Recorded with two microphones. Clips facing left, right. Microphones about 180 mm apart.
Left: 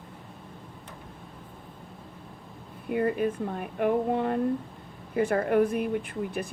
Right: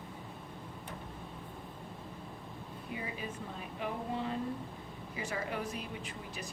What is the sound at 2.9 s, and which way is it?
Speech, 60° left (ahead or behind).